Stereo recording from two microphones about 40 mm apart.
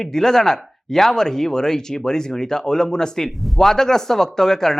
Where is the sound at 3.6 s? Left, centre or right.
Centre.